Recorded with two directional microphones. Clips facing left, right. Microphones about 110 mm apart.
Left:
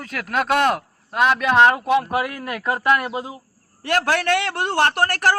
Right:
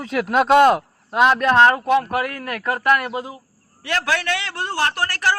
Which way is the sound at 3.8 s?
50° left (ahead or behind).